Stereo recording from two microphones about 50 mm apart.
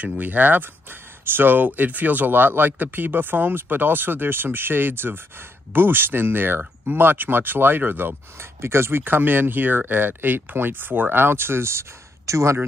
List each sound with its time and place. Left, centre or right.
0.0 s speech: right
8.4 s speech: right
12.3 s speech: right